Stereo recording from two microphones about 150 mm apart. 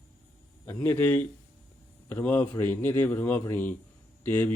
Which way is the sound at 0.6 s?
15° left (ahead or behind).